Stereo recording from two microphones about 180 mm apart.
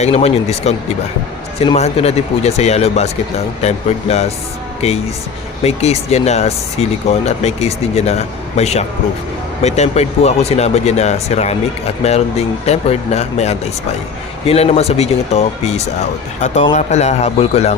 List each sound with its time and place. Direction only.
0.0 s speech: 35° left (ahead or behind)